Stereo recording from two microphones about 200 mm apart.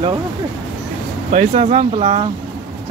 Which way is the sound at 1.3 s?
35° right (ahead or behind).